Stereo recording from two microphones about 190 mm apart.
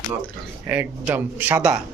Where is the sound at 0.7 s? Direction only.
10° right (ahead or behind).